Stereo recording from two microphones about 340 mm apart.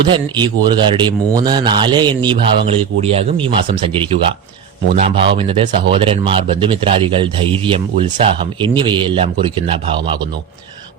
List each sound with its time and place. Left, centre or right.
0.0 s speech: centre